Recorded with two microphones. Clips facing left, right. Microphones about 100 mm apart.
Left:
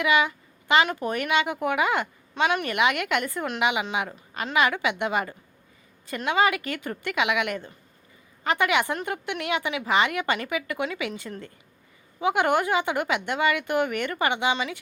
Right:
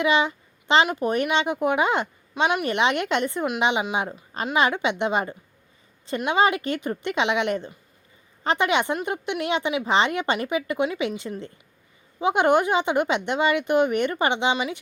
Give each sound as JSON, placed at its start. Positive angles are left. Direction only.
{"t": 0.0, "sound": "a child's voice", "side_deg": -25}